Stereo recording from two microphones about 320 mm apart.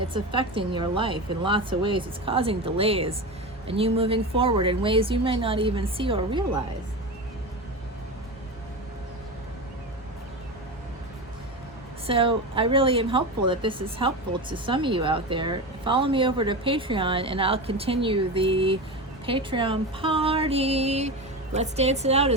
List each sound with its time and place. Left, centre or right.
0.0 s a woman's voice: centre
12.0 s a woman's voice: centre